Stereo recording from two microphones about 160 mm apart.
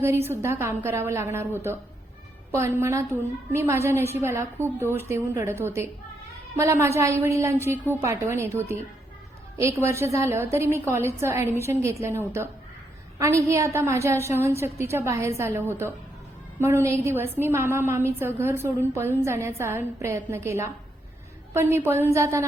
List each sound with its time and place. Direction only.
0.0 s a woman's voice: 15° right (ahead or behind)